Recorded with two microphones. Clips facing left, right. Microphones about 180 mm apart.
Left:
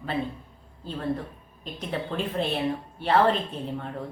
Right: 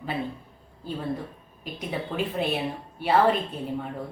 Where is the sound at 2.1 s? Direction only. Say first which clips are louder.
Right 2 dB; 10° right (ahead or behind).